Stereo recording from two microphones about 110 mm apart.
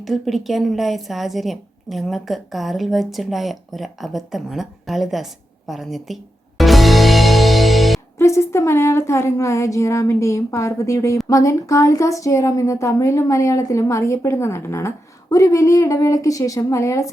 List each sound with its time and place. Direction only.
0.0 s speech: centre (ahead or behind)
6.6 s music: centre (ahead or behind)
8.2 s speech: 25° left (ahead or behind)